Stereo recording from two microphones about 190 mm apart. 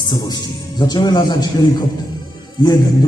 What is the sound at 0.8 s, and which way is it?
Speech, 20° left (ahead or behind).